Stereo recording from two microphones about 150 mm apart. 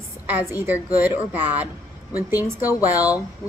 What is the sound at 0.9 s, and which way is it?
A woman's voice, 10° right (ahead or behind).